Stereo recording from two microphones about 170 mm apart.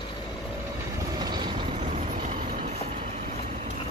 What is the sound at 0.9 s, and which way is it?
Vehicle, 25° right (ahead or behind).